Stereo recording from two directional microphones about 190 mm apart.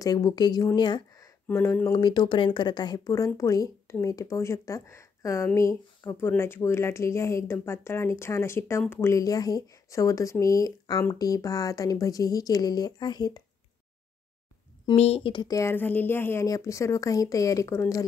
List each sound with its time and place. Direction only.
0.0 s speech: 20° left (ahead or behind)
15.0 s speech: 30° left (ahead or behind); by 18.0 s 15° left (ahead or behind)